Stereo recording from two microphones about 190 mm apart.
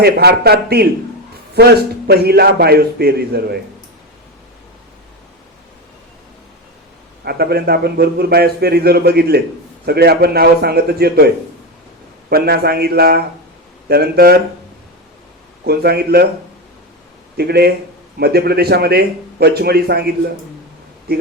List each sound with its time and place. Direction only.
0.0 s a man's voice: 55° right (ahead or behind)
7.3 s a man's voice: 55° right (ahead or behind)
12.3 s a man's voice: 55° right (ahead or behind)
15.6 s a man's voice: 55° right (ahead or behind)
17.3 s a man's voice: 55° right (ahead or behind)